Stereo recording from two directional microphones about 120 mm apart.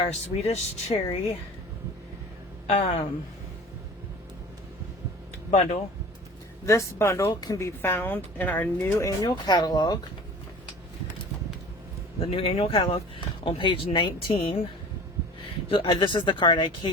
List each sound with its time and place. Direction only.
0.1 s speech: 65° left (ahead or behind)
2.6 s speech: 55° left (ahead or behind)
5.5 s speech: 65° left (ahead or behind)
6.7 s speech: 25° left (ahead or behind)
9.2 s speech: 35° left (ahead or behind)
12.2 s speech: 50° left (ahead or behind)
15.7 s speech: 45° left (ahead or behind)